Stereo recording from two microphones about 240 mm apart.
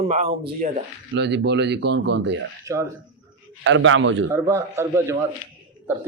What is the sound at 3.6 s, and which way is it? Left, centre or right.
Speech, right.